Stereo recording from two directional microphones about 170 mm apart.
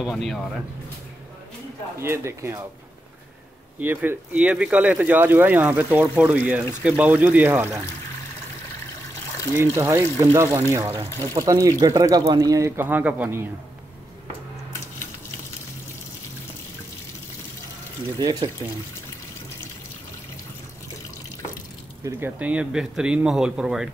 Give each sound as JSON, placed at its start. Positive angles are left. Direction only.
{"t": 0.0, "sound": "speech", "side_deg": 0}
{"t": 2.0, "sound": "speech", "side_deg": -15}
{"t": 3.8, "sound": "speech", "side_deg": -10}
{"t": 9.8, "sound": "speech", "side_deg": -15}
{"t": 18.2, "sound": "speech", "side_deg": -25}
{"t": 22.0, "sound": "speech", "side_deg": -10}